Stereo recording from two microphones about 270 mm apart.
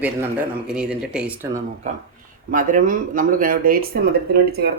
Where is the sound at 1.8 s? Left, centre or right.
Right.